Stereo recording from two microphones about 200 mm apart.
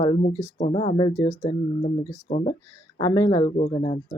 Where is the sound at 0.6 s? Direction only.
30° left (ahead or behind).